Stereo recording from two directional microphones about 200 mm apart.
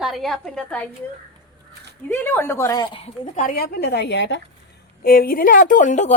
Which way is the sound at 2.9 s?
30° left (ahead or behind).